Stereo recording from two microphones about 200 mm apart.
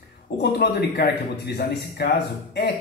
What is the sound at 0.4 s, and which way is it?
A man's voice, 55° left (ahead or behind).